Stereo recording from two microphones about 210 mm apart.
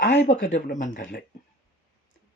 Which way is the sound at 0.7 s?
40° left (ahead or behind).